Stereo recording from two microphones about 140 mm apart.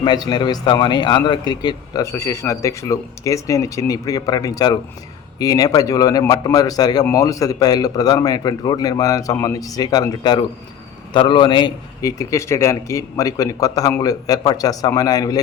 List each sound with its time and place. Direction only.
0.0 s a man's voice: 30° left (ahead or behind)